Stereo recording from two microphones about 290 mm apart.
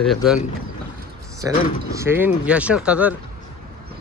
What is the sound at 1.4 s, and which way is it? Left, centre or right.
Speech, centre.